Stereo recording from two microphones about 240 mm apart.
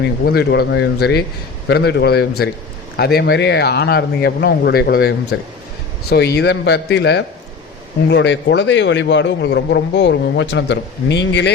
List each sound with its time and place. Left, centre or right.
0.3 s a man's voice: left